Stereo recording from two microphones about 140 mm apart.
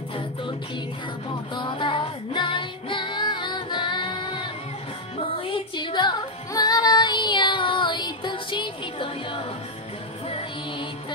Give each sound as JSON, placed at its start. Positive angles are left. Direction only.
{"t": 1.5, "sound": "music", "side_deg": 35}
{"t": 5.5, "sound": "music", "side_deg": 35}